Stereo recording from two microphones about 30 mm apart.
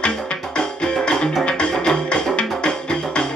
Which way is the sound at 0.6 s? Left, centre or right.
Left.